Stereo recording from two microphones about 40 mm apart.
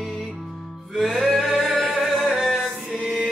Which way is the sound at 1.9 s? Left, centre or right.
Centre.